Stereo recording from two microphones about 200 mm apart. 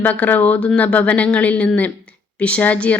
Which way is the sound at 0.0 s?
10° left (ahead or behind).